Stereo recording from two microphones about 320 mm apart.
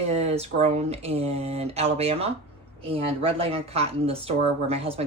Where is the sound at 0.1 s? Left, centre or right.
Centre.